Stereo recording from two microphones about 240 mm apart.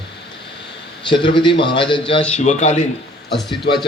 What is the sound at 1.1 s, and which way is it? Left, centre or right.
A man's voice, left.